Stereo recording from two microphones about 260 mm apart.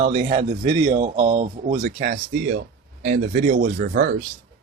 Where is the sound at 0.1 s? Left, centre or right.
Right.